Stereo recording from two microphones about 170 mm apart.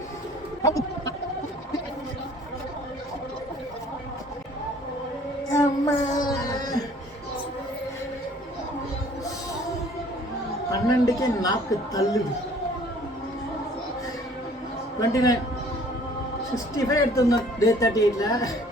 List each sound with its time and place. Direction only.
0.6 s a sound: 20° left (ahead or behind)
5.5 s child singing: 20° left (ahead or behind)
10.8 s a man's voice: 20° left (ahead or behind)
15.1 s speech: 20° left (ahead or behind)
16.7 s speech: 20° left (ahead or behind)